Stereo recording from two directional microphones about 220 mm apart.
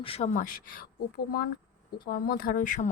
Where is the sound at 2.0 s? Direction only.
40° left (ahead or behind).